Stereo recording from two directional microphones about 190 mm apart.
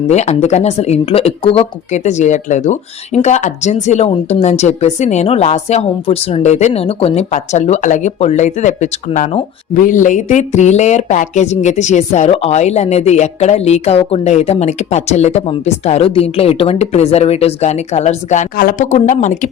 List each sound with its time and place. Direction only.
0.1 s speech: 35° left (ahead or behind)